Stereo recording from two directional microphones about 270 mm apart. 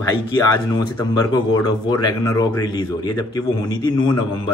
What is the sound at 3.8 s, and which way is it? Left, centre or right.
Speech, centre.